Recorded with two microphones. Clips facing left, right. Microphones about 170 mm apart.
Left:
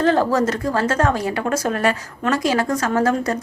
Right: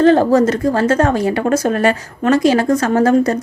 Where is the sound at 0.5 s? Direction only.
25° right (ahead or behind).